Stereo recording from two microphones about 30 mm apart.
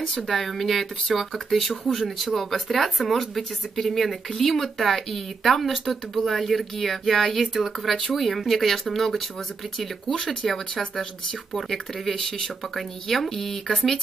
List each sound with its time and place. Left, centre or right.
0.1 s speech: centre
1.7 s speech: centre
12.2 s speech: centre